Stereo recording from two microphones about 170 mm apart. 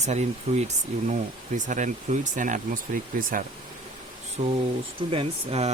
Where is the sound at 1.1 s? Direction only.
45° right (ahead or behind).